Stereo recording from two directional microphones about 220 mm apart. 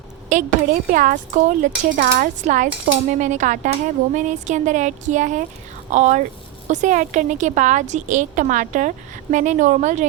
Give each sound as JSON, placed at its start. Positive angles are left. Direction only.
{"t": 0.3, "sound": "speech", "side_deg": -35}